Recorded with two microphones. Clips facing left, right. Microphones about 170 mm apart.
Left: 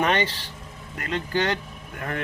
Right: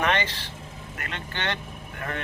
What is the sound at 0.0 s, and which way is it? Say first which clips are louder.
Speech: left 2 dB; 35° left (ahead or behind).